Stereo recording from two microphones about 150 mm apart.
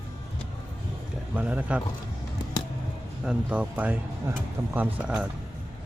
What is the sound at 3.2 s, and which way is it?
Speech, 10° right (ahead or behind).